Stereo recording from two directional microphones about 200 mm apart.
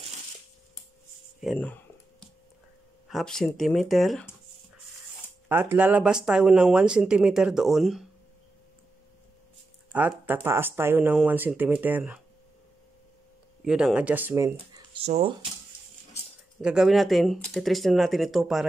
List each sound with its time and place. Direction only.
1.4 s a sound: 5° left (ahead or behind)
3.1 s speech: centre (ahead or behind)
5.5 s speech: 10° right (ahead or behind)
9.9 s speech: 10° right (ahead or behind)
13.7 s speech: 5° right (ahead or behind)
15.0 s speech: 35° right (ahead or behind)
16.6 s speech: 5° right (ahead or behind)